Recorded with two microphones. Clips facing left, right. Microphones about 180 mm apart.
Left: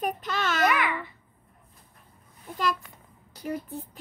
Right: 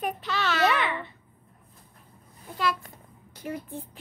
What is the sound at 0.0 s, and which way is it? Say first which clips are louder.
Babbling: even; 45° left (ahead or behind).